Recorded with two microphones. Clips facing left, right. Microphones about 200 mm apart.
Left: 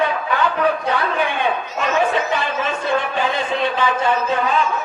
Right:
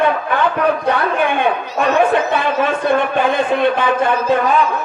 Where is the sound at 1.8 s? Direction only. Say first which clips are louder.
Right 5 dB; 55° right (ahead or behind).